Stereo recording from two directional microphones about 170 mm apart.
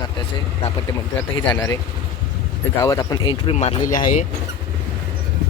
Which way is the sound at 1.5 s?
20° left (ahead or behind).